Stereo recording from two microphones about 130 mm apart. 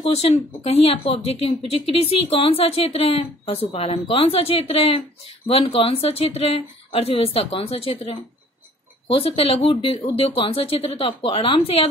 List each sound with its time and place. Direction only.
0.1 s speech: 55° left (ahead or behind)